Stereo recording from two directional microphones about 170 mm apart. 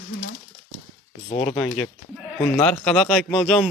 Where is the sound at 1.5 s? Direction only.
5° left (ahead or behind).